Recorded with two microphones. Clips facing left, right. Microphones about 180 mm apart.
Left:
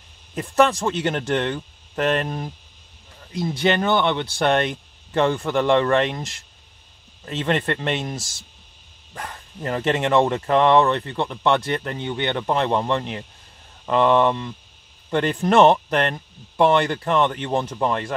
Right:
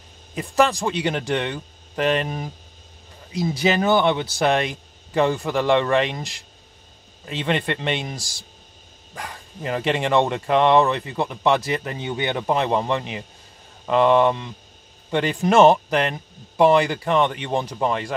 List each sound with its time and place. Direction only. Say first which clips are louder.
0.3 s speech: left 1 dB; centre (ahead or behind)
3.6 s speech: right 1 dB; 5° right (ahead or behind)
8.2 s speech: left 2 dB; 35° right (ahead or behind)
9.1 s speech: even; centre (ahead or behind)